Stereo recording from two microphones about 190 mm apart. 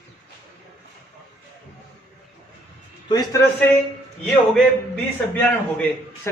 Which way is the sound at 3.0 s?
20° left (ahead or behind).